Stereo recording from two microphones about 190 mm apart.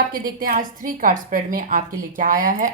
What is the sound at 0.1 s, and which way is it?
Speech, 50° right (ahead or behind).